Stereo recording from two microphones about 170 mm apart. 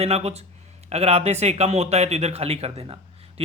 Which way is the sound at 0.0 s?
40° right (ahead or behind).